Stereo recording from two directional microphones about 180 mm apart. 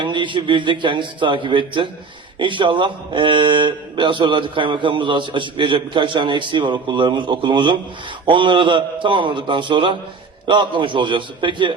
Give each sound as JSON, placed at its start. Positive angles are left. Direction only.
{"t": 0.0, "sound": "speech", "side_deg": -25}